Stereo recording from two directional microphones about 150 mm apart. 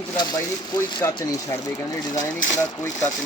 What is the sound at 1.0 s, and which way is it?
Speech, 20° left (ahead or behind).